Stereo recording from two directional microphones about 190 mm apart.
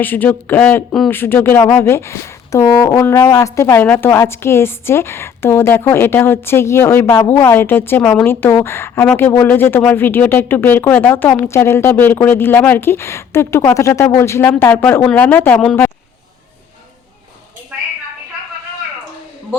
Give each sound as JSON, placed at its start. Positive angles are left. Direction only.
{"t": 0.0, "sound": "speech", "side_deg": 10}